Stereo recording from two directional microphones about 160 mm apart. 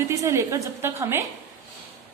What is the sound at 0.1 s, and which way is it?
A woman's voice, 20° right (ahead or behind).